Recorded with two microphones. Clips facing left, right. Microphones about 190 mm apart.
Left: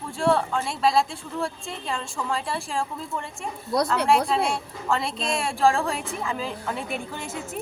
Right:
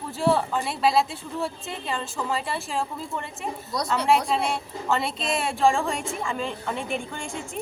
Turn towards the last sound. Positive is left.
turn(degrees=5)  # may be behind; listen again after turning